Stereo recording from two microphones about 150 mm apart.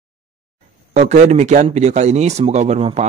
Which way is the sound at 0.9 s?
55° right (ahead or behind).